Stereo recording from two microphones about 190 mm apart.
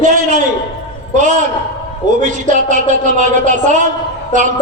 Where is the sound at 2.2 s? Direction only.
45° right (ahead or behind).